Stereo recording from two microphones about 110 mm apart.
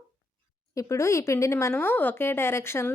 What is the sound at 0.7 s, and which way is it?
Speech, 30° left (ahead or behind).